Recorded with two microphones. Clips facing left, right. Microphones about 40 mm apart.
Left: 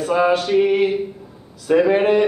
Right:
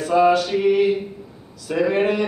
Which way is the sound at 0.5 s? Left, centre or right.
Left.